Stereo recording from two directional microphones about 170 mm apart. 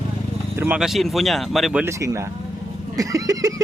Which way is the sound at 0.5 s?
10° right (ahead or behind).